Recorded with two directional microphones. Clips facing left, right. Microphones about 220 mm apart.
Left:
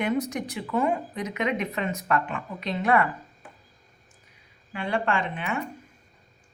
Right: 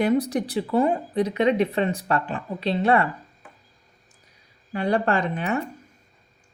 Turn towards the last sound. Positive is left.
turn(degrees=-40)  # may be behind; listen again after turning